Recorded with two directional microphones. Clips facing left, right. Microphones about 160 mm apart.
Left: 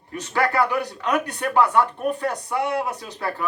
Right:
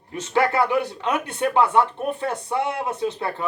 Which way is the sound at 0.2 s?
25° right (ahead or behind).